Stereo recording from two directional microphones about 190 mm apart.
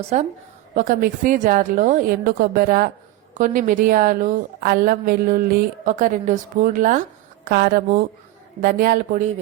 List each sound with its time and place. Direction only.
0.1 s a woman's voice: 35° right (ahead or behind)
7.4 s a woman's voice: 55° right (ahead or behind)